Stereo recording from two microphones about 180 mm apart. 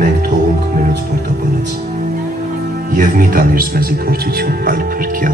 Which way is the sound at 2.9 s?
50° right (ahead or behind).